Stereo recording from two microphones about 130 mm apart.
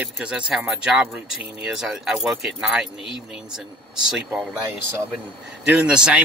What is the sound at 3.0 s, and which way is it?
Speech, 45° left (ahead or behind).